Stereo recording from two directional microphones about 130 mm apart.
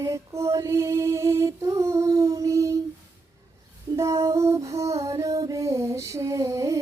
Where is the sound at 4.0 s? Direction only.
25° right (ahead or behind).